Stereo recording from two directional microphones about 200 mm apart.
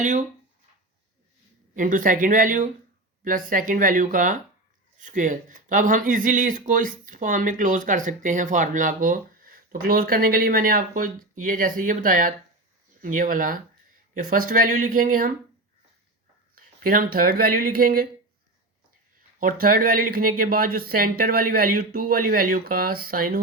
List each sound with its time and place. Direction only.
0.0 s speech: 40° right (ahead or behind)
1.7 s speech: 40° right (ahead or behind)
16.6 s speech: 45° right (ahead or behind)
19.4 s speech: 45° right (ahead or behind)